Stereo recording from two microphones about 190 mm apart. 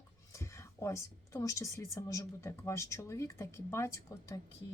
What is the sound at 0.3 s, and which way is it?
Speech, 15° left (ahead or behind).